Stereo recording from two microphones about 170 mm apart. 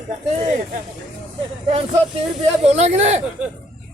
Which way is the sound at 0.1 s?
40° right (ahead or behind).